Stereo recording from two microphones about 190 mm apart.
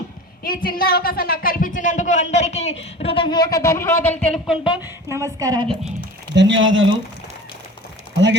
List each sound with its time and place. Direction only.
0.4 s a woman's voice: 50° left (ahead or behind); by 4.5 s 5° left (ahead or behind)
4.6 s speech: 20° left (ahead or behind)
5.0 s a woman's voice: 15° right (ahead or behind)
6.3 s speech: 75° right (ahead or behind); by 6.8 s 90° right